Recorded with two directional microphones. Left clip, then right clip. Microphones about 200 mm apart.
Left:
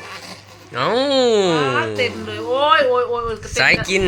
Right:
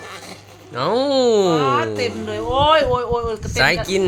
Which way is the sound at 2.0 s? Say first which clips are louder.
Left 1 dB; 65° right (ahead or behind).